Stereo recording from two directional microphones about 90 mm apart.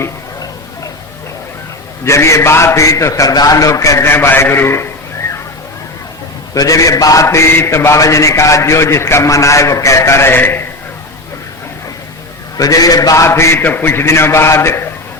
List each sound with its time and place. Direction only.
2.0 s a man's voice: 30° left (ahead or behind)
6.5 s a man's voice: 40° left (ahead or behind)
7.3 s a man's voice: 30° left (ahead or behind)
12.5 s a man's voice: 40° left (ahead or behind)